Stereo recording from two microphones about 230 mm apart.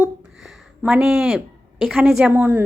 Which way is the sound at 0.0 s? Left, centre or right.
Centre.